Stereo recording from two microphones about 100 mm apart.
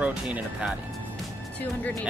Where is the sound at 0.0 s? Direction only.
10° right (ahead or behind).